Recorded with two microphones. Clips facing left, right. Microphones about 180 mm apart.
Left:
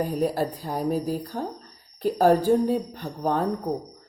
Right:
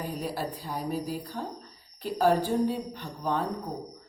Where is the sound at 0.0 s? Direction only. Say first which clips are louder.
Left 8 dB; 45° left (ahead or behind).